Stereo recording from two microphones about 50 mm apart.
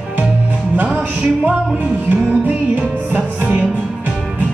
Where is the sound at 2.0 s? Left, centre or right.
Right.